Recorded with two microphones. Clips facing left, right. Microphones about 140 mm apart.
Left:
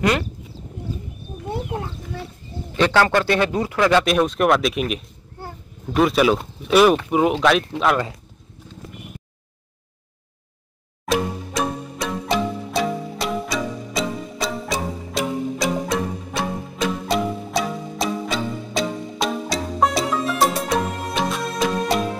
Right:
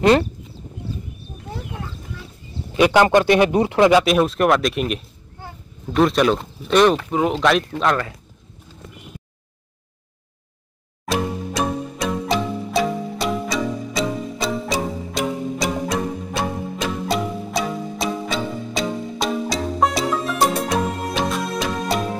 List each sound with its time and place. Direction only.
2.7 s speech: 15° right (ahead or behind)
4.0 s speech: centre (ahead or behind)
11.1 s music: centre (ahead or behind)